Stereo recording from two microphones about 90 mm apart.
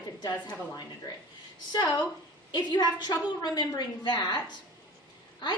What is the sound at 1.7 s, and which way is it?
A woman's voice, 45° left (ahead or behind).